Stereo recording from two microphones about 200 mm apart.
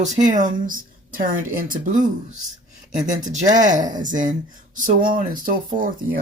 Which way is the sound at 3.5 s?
40° right (ahead or behind).